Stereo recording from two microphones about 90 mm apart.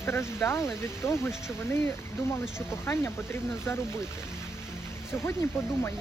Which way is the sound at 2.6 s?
25° left (ahead or behind).